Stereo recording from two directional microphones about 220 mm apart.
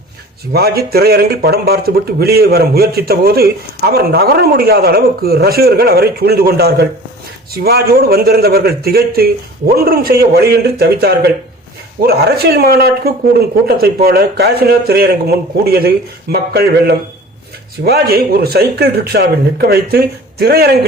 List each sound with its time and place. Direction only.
0.5 s speech: 45° right (ahead or behind)